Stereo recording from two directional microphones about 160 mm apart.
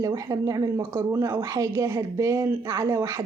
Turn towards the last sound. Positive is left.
turn(degrees=-20)  # may be behind; listen again after turning